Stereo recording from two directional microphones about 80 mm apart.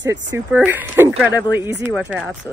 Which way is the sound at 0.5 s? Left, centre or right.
Right.